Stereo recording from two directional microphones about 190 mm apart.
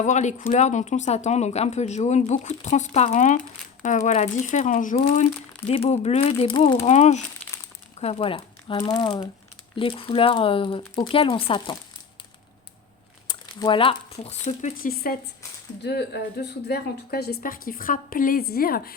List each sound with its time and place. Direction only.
0.0 s speech: 40° left (ahead or behind)
6.8 s speech: 35° left (ahead or behind)
13.2 s speech: 25° left (ahead or behind)
14.4 s speech: 45° left (ahead or behind)